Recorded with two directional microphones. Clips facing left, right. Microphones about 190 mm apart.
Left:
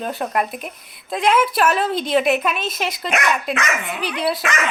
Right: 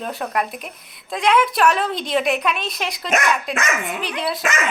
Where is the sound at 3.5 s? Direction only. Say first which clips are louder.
Even; 45° right (ahead or behind).